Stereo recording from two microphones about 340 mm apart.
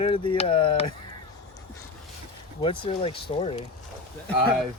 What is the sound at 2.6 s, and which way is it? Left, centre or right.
Speech, centre.